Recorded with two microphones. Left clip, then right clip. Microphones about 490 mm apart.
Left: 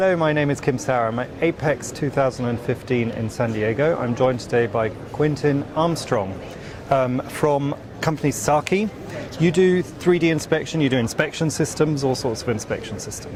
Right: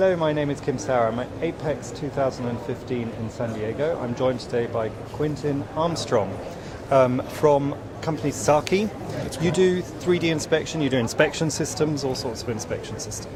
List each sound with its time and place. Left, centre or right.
0.0 s speech: left
8.0 s speech: left